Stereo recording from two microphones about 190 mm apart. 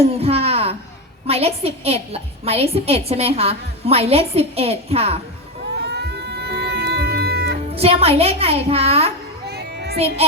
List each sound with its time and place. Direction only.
0.0 s a sound: 30° right (ahead or behind)
1.3 s a woman's voice: 30° right (ahead or behind)
5.8 s music: 60° right (ahead or behind)
7.8 s a woman's voice: 30° right (ahead or behind)
9.5 s child singing: 60° right (ahead or behind)